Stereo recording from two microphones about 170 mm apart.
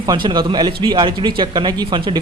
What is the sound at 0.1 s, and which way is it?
A man's voice, 25° right (ahead or behind).